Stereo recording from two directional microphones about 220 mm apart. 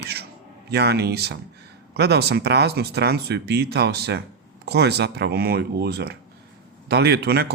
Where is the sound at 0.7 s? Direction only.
50° right (ahead or behind).